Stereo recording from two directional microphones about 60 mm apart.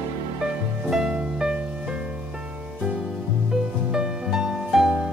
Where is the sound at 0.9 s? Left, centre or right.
Centre.